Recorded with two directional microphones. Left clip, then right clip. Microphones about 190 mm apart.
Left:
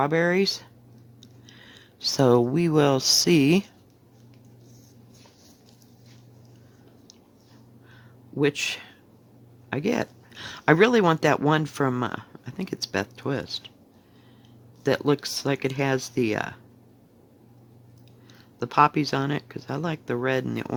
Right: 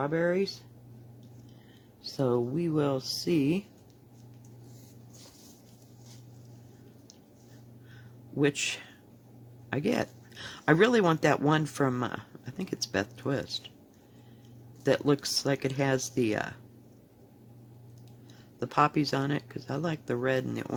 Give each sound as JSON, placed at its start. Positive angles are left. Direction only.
{"t": 0.0, "sound": "speech", "side_deg": 50}
{"t": 2.0, "sound": "speech", "side_deg": 45}
{"t": 8.4, "sound": "speech", "side_deg": 20}
{"t": 14.8, "sound": "speech", "side_deg": 20}
{"t": 18.6, "sound": "speech", "side_deg": 20}